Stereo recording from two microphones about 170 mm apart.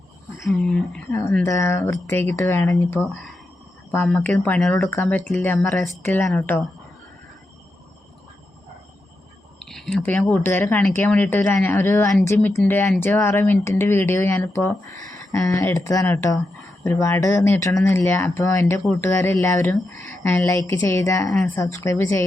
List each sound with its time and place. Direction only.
0.4 s speech: centre (ahead or behind)
1.5 s speech: 15° left (ahead or behind)
9.6 s speech: centre (ahead or behind); by 21.2 s 20° left (ahead or behind)
21.2 s speech: centre (ahead or behind)
21.6 s a woman's voice: 20° left (ahead or behind)